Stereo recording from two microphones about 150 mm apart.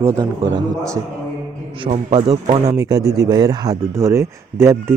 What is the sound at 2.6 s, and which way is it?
A man's voice, 25° right (ahead or behind).